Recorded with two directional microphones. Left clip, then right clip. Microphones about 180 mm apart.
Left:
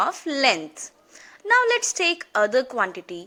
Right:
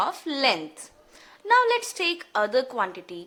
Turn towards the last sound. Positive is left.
turn(degrees=20)  # may be behind; listen again after turning